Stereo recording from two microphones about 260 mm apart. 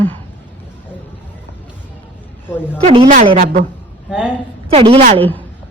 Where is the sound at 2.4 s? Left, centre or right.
Centre.